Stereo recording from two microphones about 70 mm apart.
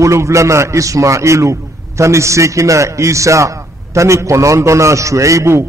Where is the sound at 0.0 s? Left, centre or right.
Right.